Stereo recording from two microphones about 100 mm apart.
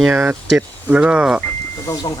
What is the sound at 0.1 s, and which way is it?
Speech, 20° right (ahead or behind).